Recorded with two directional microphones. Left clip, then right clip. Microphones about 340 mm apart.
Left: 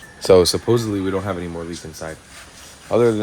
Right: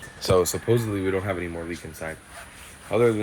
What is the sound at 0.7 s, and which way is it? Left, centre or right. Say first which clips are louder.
Speech: left 4 dB; centre.